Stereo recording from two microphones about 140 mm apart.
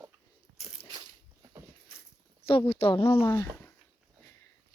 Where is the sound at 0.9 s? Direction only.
30° right (ahead or behind).